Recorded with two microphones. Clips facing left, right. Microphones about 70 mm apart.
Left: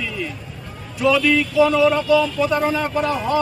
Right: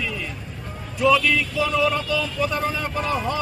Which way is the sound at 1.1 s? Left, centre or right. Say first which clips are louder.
Left 4 dB; centre.